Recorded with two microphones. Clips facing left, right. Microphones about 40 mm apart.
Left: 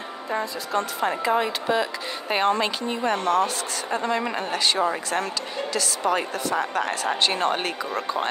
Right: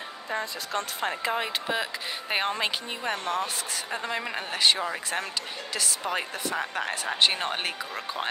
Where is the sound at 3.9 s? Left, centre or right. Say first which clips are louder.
Left 7 dB; centre.